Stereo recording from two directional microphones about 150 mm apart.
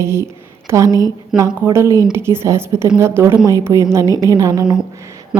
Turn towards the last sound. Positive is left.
turn(degrees=-25)  # may be behind; listen again after turning